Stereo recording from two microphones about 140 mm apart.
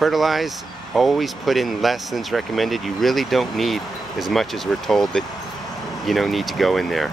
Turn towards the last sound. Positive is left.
turn(degrees=0)  # may be behind; listen again after turning